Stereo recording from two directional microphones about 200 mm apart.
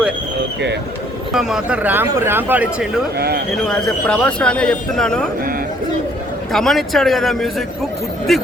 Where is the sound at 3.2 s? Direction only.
50° right (ahead or behind).